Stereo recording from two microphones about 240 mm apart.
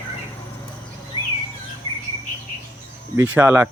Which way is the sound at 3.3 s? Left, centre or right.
Centre.